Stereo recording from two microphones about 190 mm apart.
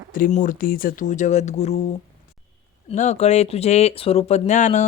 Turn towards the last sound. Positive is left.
turn(degrees=40)  # may be behind; listen again after turning